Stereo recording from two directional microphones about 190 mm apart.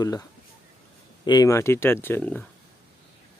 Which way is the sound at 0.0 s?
20° left (ahead or behind).